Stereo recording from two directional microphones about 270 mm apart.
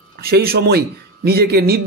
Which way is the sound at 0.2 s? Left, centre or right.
Right.